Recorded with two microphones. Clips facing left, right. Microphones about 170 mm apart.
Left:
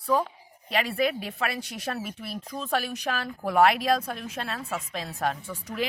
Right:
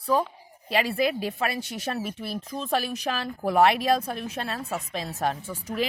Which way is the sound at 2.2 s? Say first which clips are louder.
Right 3 dB; 30° right (ahead or behind).